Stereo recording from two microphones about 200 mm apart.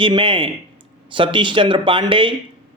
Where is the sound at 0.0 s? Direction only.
25° right (ahead or behind).